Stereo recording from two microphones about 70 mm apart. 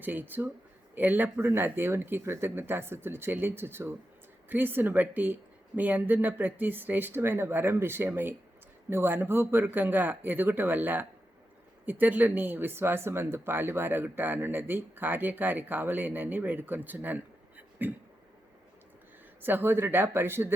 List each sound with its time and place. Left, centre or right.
0.0 s speech: right
19.4 s speech: right